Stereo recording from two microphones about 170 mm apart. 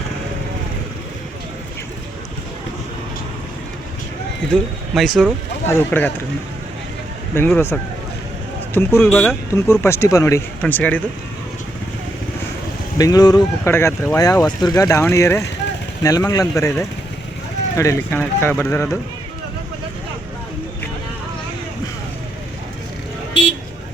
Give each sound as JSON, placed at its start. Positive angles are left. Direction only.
{"t": 4.9, "sound": "speech", "side_deg": 0}
{"t": 5.6, "sound": "speech", "side_deg": 10}
{"t": 7.3, "sound": "speech", "side_deg": 15}
{"t": 13.0, "sound": "speech", "side_deg": 20}